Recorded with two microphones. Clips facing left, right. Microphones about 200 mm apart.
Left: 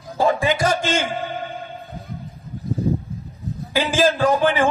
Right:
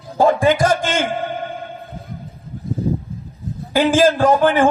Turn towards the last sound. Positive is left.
turn(degrees=-50)  # may be behind; listen again after turning